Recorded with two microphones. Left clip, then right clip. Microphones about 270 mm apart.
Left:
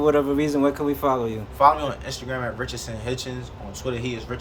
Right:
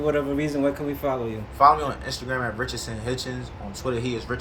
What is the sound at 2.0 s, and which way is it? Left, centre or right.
Speech, left.